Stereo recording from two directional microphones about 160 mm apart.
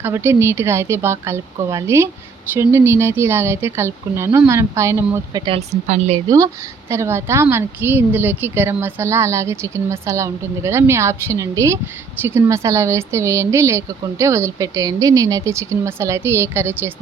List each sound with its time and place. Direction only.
0.0 s a woman's voice: 15° right (ahead or behind)
5.5 s speech: 40° right (ahead or behind)
6.2 s a woman's voice: 20° right (ahead or behind)